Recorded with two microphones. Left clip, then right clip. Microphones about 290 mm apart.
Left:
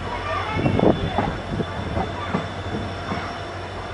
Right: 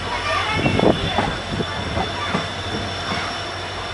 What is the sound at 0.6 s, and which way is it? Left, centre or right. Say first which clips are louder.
Vehicle: even; left.